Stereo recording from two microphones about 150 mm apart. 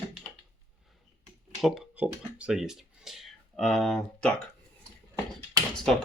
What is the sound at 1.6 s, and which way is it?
Speech, 5° right (ahead or behind).